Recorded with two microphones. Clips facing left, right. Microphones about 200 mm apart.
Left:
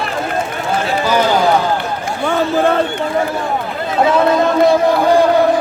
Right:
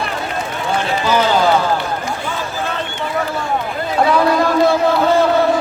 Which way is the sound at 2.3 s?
55° left (ahead or behind).